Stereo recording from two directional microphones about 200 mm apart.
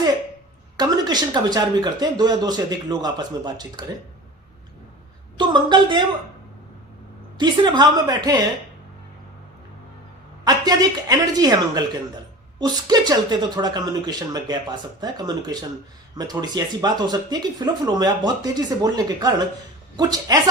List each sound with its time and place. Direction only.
0.8 s speech: 20° right (ahead or behind)
5.4 s speech: 20° right (ahead or behind)
7.3 s speech: 20° right (ahead or behind)
10.4 s speech: 20° right (ahead or behind)